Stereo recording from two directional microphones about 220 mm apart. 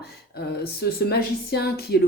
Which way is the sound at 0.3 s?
45° left (ahead or behind).